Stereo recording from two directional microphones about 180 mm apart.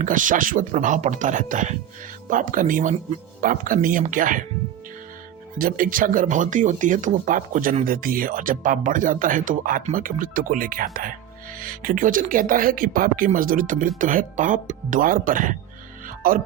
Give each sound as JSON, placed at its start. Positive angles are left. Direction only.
{"t": 0.0, "sound": "speech", "side_deg": -45}
{"t": 5.5, "sound": "speech", "side_deg": -50}
{"t": 16.0, "sound": "music", "side_deg": -50}